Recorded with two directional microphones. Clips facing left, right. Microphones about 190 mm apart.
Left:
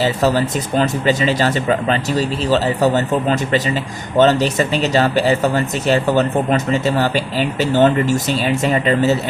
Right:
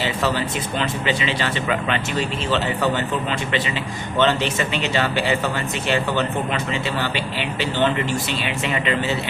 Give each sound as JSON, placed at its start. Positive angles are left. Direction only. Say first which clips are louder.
{"t": 0.0, "sound": "speech", "louder": "left 6 dB", "side_deg": 40}